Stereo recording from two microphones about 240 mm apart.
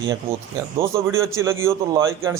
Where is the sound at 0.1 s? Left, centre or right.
Centre.